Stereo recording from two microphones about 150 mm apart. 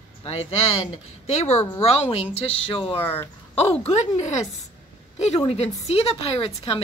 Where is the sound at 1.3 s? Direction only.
45° left (ahead or behind).